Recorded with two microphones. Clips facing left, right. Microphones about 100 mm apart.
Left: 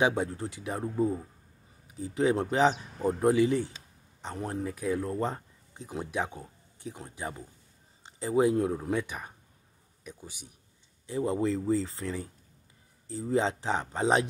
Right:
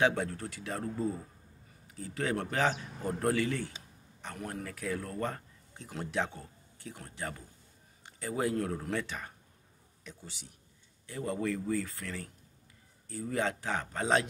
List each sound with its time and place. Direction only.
0.0 s speech: 20° left (ahead or behind)